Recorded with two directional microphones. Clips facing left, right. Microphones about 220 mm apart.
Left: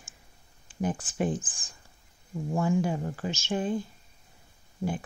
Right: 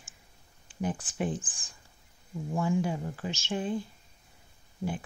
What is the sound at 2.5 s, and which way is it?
Speech, 45° left (ahead or behind).